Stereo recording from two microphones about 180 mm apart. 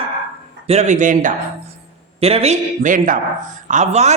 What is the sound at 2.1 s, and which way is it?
A man's voice, 35° right (ahead or behind).